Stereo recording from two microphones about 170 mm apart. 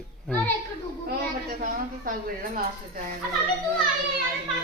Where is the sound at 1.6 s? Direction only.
55° right (ahead or behind).